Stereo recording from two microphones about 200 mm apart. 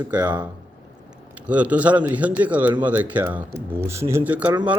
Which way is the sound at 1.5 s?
5° right (ahead or behind).